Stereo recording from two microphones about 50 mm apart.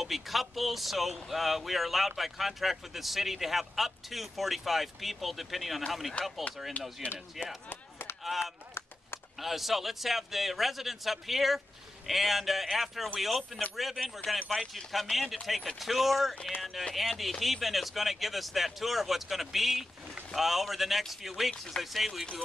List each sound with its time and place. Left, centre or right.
0.0 s speech: centre
6.2 s speech: left
7.7 s chop: left
8.2 s chop: centre
9.4 s speech: centre